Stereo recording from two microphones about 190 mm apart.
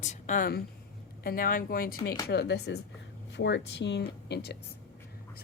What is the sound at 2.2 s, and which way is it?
Speech, 60° left (ahead or behind).